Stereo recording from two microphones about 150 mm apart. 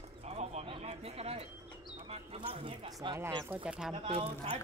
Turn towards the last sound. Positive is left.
turn(degrees=-40)  # may be behind; listen again after turning